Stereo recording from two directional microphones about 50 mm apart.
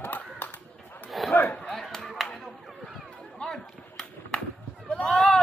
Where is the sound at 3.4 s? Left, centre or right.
Centre.